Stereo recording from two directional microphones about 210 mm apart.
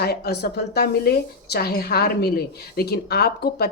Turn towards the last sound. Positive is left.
turn(degrees=50)  # may be behind; listen again after turning